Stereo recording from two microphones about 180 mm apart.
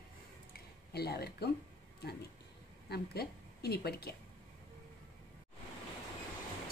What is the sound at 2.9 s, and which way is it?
A woman's voice, 60° left (ahead or behind).